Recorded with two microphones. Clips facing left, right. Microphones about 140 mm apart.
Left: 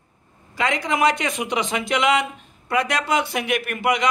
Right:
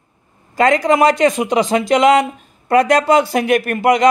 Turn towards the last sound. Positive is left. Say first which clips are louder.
# right 8 dB
turn(degrees=-40)  # may be behind; listen again after turning